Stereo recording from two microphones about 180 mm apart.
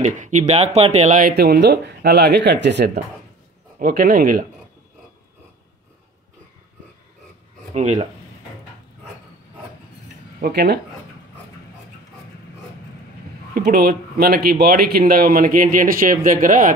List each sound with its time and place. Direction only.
0.0 s speech: 40° right (ahead or behind)
1.3 s speech: 65° right (ahead or behind)
3.8 s speech: 55° right (ahead or behind)
7.7 s speech: 40° right (ahead or behind)
10.4 s a man's voice: 60° right (ahead or behind)
13.6 s a man's voice: 60° right (ahead or behind)